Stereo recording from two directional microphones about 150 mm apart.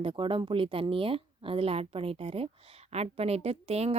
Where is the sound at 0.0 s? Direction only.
35° right (ahead or behind).